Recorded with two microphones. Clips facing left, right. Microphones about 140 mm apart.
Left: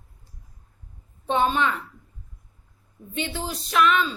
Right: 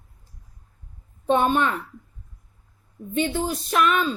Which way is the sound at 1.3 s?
50° right (ahead or behind).